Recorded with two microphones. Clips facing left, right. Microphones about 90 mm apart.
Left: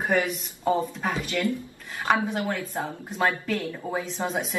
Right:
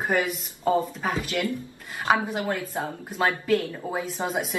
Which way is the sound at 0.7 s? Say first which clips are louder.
Right 2 dB; centre (ahead or behind).